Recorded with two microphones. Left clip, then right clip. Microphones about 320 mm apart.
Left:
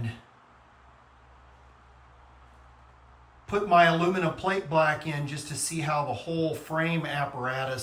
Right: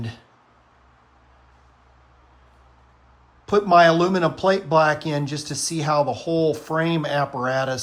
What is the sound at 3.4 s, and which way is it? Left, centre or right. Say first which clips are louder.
Speech: right 6 dB; centre.